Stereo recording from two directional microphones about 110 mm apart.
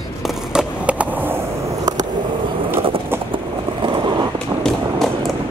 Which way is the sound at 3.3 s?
50° right (ahead or behind).